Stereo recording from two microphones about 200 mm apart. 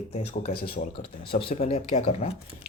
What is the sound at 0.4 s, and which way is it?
Speech, 50° left (ahead or behind).